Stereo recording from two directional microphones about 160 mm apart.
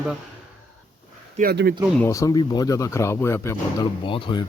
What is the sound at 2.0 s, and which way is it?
Speech, 20° left (ahead or behind).